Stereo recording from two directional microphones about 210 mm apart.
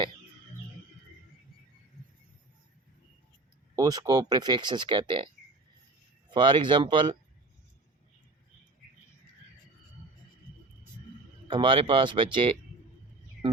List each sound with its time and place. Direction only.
3.8 s speech: 15° right (ahead or behind)
11.4 s speech: 25° right (ahead or behind)